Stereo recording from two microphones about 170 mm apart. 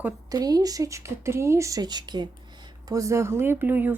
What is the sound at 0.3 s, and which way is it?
Speech, 20° right (ahead or behind).